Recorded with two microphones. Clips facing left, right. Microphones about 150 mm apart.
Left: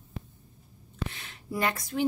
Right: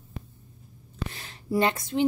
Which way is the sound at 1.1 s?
35° right (ahead or behind).